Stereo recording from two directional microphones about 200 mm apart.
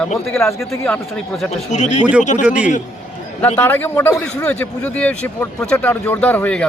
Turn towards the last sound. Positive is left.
turn(degrees=5)  # may be behind; listen again after turning